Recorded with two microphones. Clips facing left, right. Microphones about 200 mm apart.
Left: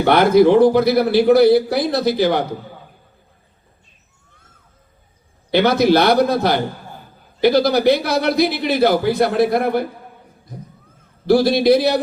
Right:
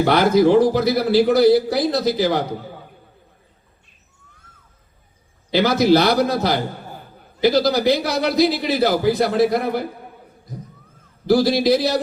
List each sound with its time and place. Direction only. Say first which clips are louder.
0.0 s a man's voice: left 3 dB; 60° left (ahead or behind)
5.5 s a man's voice: left 1 dB; 60° left (ahead or behind)
11.3 s a man's voice: left 2 dB; 60° left (ahead or behind)